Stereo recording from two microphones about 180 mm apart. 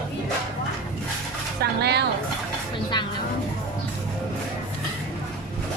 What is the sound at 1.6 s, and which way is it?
Speech, 65° right (ahead or behind).